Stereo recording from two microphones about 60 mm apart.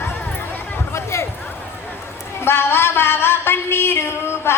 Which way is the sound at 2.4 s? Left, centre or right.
Left.